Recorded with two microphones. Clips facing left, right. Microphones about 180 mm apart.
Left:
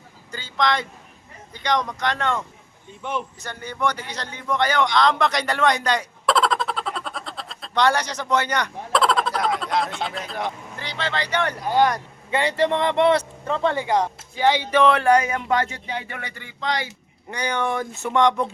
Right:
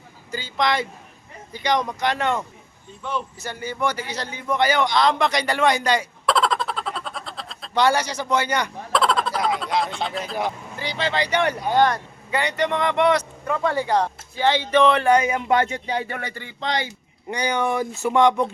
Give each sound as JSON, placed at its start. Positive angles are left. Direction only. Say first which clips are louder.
{"t": 0.3, "sound": "speech", "louder": "even", "side_deg": -10}
{"t": 3.0, "sound": "speech", "louder": "even", "side_deg": 20}
{"t": 3.4, "sound": "speech", "louder": "right 1 dB", "side_deg": -5}
{"t": 11.6, "sound": "speech", "louder": "left 1 dB", "side_deg": 5}
{"t": 12.3, "sound": "speech", "louder": "left 2 dB", "side_deg": 30}
{"t": 15.4, "sound": "speech", "louder": "right 3 dB", "side_deg": -25}
{"t": 17.3, "sound": "speech", "louder": "right 2 dB", "side_deg": -10}